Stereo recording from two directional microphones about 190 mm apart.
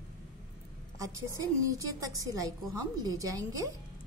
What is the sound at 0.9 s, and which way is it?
A woman's voice, 15° right (ahead or behind).